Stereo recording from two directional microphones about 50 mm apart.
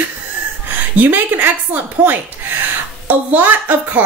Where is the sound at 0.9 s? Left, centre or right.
Right.